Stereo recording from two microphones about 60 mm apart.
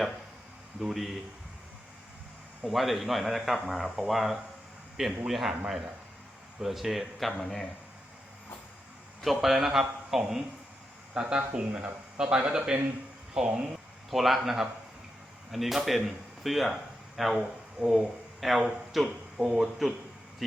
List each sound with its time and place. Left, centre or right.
0.8 s speech: centre
2.6 s speech: centre
9.2 s speech: centre
14.1 s speech: centre